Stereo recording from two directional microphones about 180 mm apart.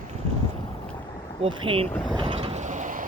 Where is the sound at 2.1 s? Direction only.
25° right (ahead or behind); by 3.0 s 45° right (ahead or behind).